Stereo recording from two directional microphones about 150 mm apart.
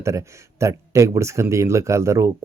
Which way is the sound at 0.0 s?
20° right (ahead or behind).